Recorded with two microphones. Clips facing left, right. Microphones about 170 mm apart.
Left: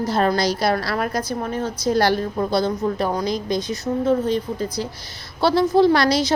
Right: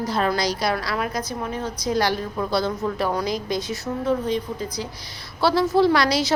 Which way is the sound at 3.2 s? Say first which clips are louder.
Left 3 dB; 5° right (ahead or behind).